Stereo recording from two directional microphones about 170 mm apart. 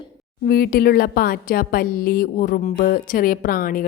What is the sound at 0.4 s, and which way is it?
A woman's voice, 60° left (ahead or behind).